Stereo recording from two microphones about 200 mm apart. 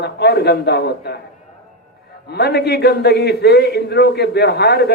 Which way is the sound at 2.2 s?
55° left (ahead or behind).